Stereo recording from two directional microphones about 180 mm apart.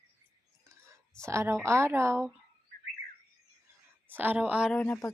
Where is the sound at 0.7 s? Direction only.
15° right (ahead or behind).